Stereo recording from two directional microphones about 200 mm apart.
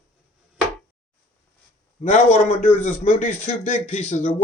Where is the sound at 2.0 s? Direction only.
35° left (ahead or behind).